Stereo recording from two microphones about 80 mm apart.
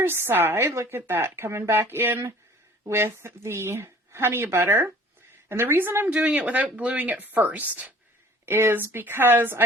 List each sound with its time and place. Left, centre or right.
0.0 s speech: right
8.4 s speech: right